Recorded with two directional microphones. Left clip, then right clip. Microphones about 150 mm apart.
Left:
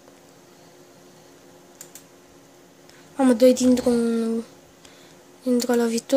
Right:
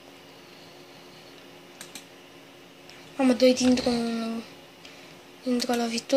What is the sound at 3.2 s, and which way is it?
Speech, 65° left (ahead or behind).